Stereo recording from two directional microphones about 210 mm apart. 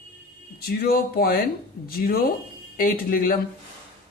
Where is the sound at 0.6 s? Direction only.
45° left (ahead or behind).